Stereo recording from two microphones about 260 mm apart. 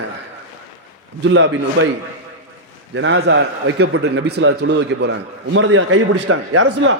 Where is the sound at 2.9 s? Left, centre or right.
Right.